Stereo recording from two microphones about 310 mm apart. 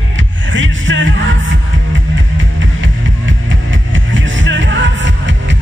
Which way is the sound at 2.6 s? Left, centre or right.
Right.